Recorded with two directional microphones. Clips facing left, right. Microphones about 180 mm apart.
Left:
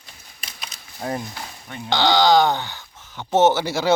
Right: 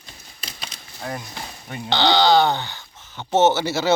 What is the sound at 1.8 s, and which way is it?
Speech, 10° left (ahead or behind).